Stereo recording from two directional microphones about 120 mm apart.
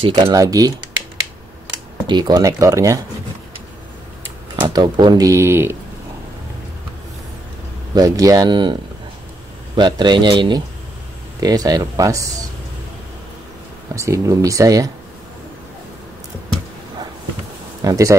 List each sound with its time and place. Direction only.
0.1 s speech: 30° right (ahead or behind)
2.0 s speech: 35° right (ahead or behind)
4.6 s speech: 40° right (ahead or behind); by 5.8 s 20° right (ahead or behind)
7.9 s speech: 30° right (ahead or behind)
9.8 s speech: 40° right (ahead or behind)
13.9 s speech: 25° right (ahead or behind)
17.8 s speech: 25° right (ahead or behind)